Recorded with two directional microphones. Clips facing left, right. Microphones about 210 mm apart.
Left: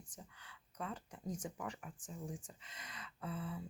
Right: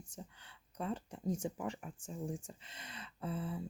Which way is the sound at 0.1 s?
25° right (ahead or behind).